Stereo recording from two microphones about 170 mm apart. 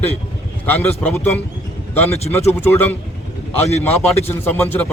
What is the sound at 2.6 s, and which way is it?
A man's voice, 15° left (ahead or behind).